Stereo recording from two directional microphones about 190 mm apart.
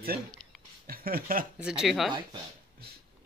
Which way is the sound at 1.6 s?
5° right (ahead or behind).